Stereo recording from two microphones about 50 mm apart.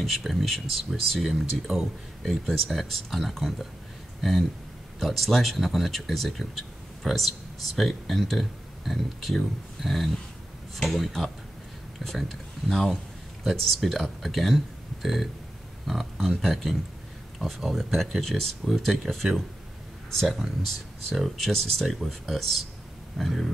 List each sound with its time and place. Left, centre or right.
0.0 s speech: centre
21.1 s speech: centre